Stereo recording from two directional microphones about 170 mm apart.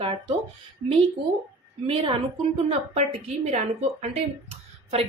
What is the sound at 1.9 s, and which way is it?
A woman's voice, 35° right (ahead or behind).